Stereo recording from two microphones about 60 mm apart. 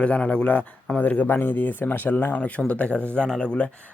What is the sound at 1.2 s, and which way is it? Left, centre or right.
Speech, left.